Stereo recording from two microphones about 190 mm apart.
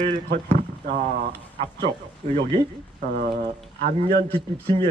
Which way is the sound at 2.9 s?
50° right (ahead or behind).